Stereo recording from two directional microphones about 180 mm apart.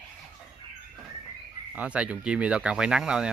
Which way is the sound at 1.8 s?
5° right (ahead or behind).